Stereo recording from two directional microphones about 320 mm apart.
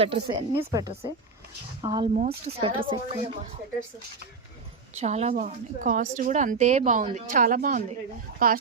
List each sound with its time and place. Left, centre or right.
0.0 s speech: centre
4.9 s a woman's voice: right